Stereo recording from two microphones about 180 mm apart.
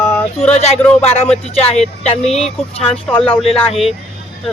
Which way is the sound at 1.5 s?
35° left (ahead or behind).